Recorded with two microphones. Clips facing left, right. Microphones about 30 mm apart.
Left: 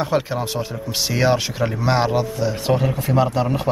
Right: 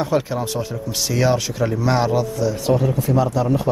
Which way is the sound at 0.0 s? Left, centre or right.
Left.